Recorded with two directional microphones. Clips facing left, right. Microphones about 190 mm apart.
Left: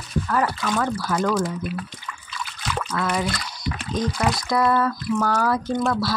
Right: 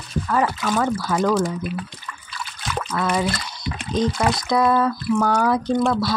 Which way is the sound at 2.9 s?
25° right (ahead or behind).